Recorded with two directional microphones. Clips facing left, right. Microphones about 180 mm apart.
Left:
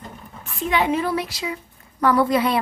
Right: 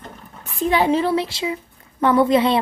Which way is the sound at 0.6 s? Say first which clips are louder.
Right 4 dB; 30° right (ahead or behind).